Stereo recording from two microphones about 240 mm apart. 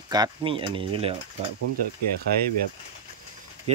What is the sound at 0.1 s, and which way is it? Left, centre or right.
Speech, centre.